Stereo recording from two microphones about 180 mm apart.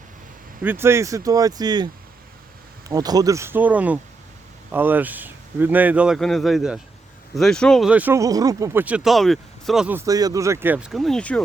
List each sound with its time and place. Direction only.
0.6 s speech: 10° right (ahead or behind)
2.9 s speech: 20° right (ahead or behind); by 11.3 s 5° left (ahead or behind)